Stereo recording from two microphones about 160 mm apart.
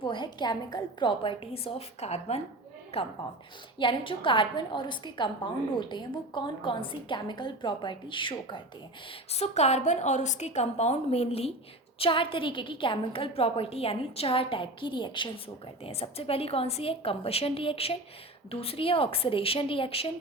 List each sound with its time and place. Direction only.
0.0 s a woman's voice: 30° left (ahead or behind)
9.3 s a woman's voice: 40° left (ahead or behind)